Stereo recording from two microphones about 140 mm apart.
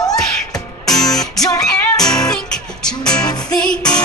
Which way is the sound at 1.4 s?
25° left (ahead or behind).